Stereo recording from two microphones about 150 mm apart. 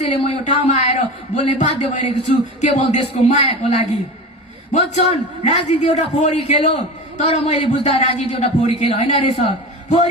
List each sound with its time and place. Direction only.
0.0 s speech: 45° left (ahead or behind)